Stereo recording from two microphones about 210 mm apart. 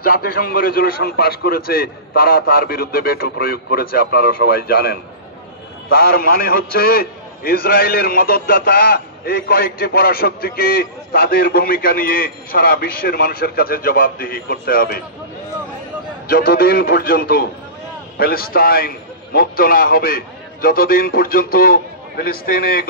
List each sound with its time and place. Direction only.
0.0 s a man's voice: 45° left (ahead or behind)
16.3 s a man's voice: 45° left (ahead or behind)